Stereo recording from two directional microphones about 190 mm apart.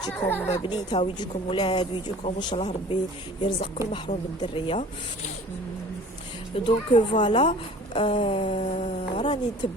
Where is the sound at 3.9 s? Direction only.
25° left (ahead or behind).